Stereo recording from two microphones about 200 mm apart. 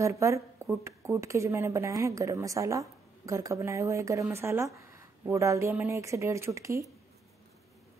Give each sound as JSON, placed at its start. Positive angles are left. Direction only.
{"t": 0.0, "sound": "a woman's voice", "side_deg": -15}